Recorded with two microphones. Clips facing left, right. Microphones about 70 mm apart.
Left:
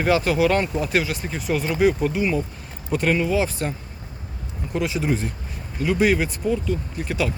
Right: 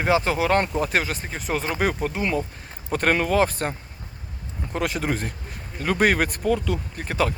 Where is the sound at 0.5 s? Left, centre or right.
Right.